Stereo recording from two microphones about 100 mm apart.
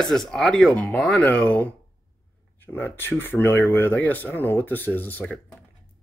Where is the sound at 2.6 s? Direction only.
20° left (ahead or behind).